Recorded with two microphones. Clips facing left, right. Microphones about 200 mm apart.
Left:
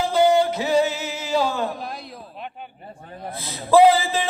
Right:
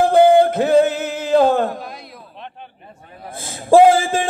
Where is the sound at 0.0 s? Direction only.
55° right (ahead or behind).